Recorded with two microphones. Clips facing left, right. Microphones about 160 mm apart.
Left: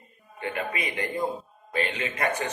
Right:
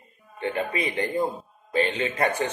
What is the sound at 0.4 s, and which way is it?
Speech, 30° right (ahead or behind).